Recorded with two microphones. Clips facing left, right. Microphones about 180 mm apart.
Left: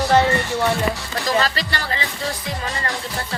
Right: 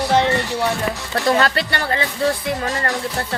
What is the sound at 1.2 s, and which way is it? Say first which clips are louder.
Speech: right 4 dB; 55° right (ahead or behind).